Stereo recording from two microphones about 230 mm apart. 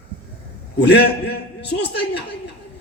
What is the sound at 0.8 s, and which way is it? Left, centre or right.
A man's voice, left.